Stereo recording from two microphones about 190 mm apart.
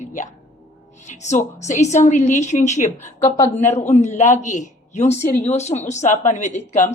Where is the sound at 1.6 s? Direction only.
40° left (ahead or behind).